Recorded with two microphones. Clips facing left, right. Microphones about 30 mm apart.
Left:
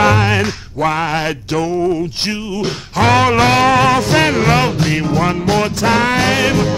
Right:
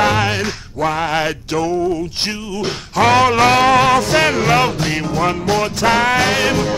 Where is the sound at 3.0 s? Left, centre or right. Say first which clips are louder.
Even; left.